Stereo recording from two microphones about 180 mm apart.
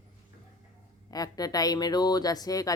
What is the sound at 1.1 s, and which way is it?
Speech, 20° left (ahead or behind).